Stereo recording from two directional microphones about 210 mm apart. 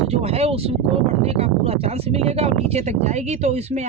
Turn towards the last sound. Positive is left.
turn(degrees=-30)  # may be behind; listen again after turning